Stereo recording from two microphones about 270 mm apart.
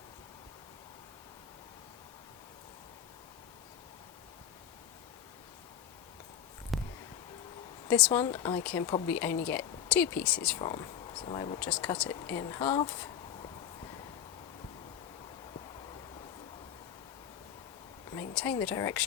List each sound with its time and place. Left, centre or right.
6.7 s a sound: centre
7.9 s speech: centre
10.6 s speech: centre
11.6 s speech: centre
18.1 s speech: centre